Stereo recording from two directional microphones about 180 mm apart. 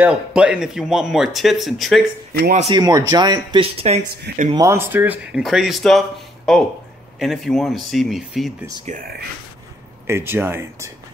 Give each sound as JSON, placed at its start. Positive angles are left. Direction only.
{"t": 0.0, "sound": "speech", "side_deg": -5}
{"t": 2.7, "sound": "speech", "side_deg": -20}
{"t": 3.7, "sound": "speech", "side_deg": -35}
{"t": 4.6, "sound": "speech", "side_deg": -15}
{"t": 8.8, "sound": "speech", "side_deg": -50}
{"t": 10.0, "sound": "speech", "side_deg": -15}